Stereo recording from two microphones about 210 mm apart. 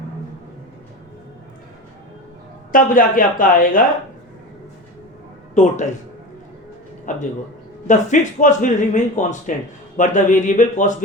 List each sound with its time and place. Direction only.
2.7 s speech: 40° left (ahead or behind)
5.6 s speech: 35° left (ahead or behind)
7.0 s a man's voice: 35° left (ahead or behind)